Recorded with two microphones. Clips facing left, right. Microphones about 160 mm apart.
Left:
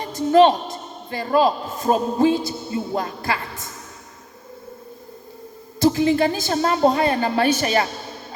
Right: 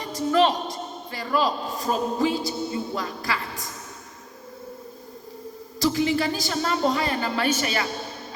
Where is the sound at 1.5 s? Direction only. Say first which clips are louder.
Left 6 dB; 55° left (ahead or behind).